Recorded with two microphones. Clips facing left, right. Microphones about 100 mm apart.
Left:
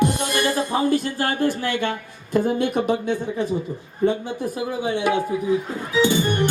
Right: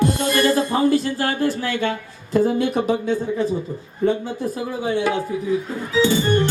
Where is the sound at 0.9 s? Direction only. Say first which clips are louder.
Right 3 dB; 50° left (ahead or behind).